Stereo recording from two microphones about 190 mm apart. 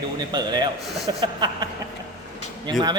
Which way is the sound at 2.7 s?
25° right (ahead or behind).